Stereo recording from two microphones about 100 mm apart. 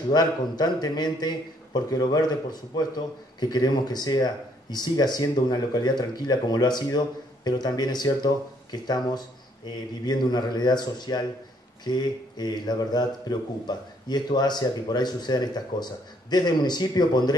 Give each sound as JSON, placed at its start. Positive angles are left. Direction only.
{"t": 0.1, "sound": "a man's voice", "side_deg": 45}